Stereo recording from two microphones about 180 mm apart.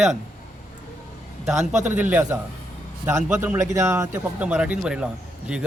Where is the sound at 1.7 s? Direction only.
40° right (ahead or behind).